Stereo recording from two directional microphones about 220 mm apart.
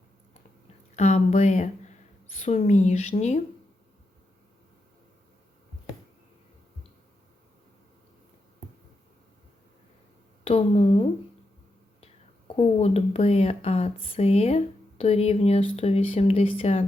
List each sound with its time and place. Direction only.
0.9 s speech: 30° left (ahead or behind)
10.4 s speech: 25° left (ahead or behind)
12.5 s speech: 30° left (ahead or behind)